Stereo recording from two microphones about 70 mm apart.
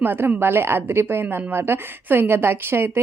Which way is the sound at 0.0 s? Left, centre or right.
Right.